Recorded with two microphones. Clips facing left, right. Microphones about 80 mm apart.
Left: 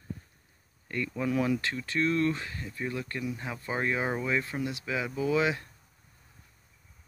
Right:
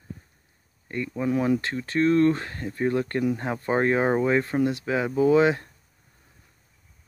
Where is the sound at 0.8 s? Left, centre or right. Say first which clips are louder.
Right 4 dB; right.